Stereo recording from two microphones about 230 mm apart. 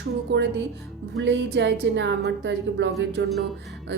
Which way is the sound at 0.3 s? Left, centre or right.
Right.